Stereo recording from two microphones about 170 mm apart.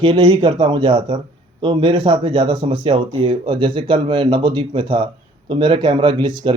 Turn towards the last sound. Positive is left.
turn(degrees=-25)  # may be behind; listen again after turning